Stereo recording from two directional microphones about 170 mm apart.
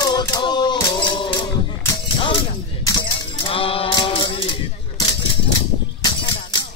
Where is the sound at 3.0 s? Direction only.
30° left (ahead or behind).